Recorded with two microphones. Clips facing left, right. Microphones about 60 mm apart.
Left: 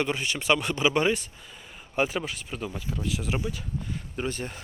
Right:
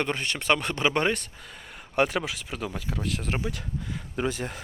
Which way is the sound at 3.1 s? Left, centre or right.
Right.